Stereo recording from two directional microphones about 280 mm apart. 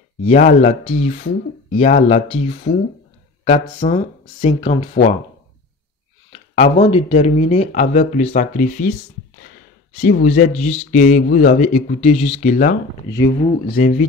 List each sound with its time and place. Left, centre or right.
0.2 s speech: left
6.3 s speech: left